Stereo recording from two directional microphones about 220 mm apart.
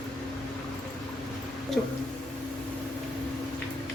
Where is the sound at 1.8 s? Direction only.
Centre (ahead or behind).